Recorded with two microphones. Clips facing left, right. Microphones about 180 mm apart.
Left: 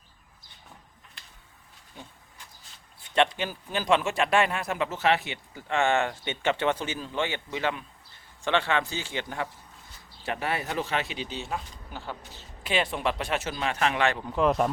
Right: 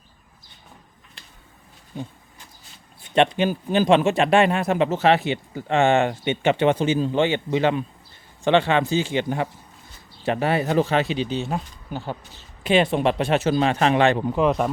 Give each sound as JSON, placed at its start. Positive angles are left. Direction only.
{"t": 3.0, "sound": "speech", "side_deg": -20}
{"t": 10.2, "sound": "speech", "side_deg": -30}
{"t": 14.3, "sound": "speech", "side_deg": 0}